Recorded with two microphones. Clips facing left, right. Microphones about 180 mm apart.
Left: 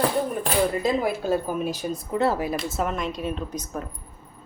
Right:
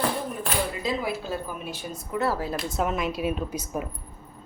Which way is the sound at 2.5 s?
Centre (ahead or behind).